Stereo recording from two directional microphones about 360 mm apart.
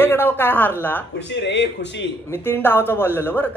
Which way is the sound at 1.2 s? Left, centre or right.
Left.